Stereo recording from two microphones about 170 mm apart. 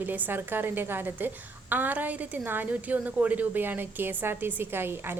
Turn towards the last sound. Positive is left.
turn(degrees=-15)  # may be behind; listen again after turning